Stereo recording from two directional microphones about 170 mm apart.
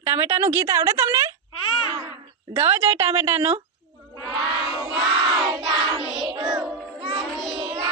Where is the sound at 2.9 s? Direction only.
35° right (ahead or behind).